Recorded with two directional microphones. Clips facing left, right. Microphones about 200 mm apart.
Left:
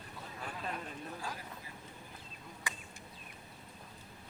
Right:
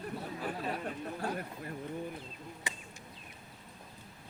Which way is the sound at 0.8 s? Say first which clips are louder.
Right 6 dB; 60° right (ahead or behind).